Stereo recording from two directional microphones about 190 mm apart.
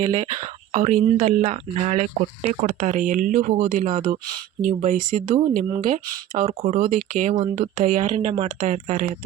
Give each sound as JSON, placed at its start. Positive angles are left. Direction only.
{"t": 0.2, "sound": "speech", "side_deg": -40}